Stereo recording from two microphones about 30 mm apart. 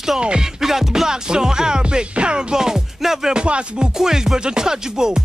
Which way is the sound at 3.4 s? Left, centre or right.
Right.